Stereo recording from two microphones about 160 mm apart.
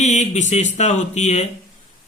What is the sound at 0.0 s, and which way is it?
Speech, 50° left (ahead or behind).